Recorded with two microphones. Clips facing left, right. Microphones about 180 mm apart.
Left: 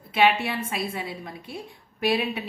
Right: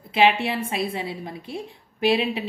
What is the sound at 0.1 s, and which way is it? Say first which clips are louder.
A woman's voice: right 2 dB; 25° right (ahead or behind).